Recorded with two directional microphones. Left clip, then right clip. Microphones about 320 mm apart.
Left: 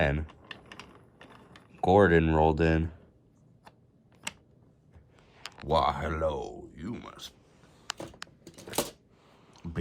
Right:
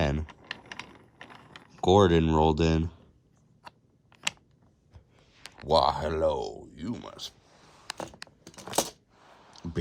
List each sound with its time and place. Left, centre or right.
0.0 s typing: centre
0.3 s typing: right
1.8 s speech: centre
5.6 s speech: centre
8.4 s a sound: centre